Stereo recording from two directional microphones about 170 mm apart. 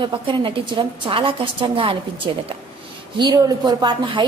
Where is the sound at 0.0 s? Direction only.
30° right (ahead or behind).